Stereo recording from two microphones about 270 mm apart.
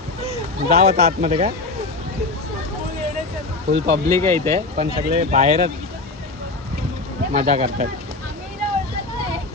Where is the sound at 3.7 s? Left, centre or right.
Right.